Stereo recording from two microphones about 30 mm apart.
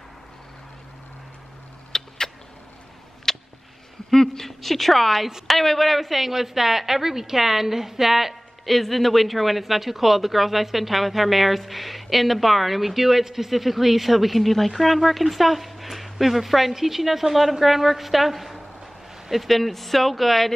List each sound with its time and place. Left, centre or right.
1.9 s a sound: centre
4.1 s a woman's voice: centre
8.6 s speech: centre